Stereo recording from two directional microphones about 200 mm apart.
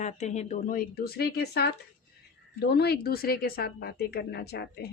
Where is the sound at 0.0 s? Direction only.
35° left (ahead or behind).